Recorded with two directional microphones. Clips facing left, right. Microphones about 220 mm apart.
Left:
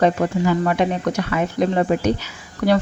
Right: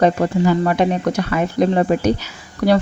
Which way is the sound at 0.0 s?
35° right (ahead or behind).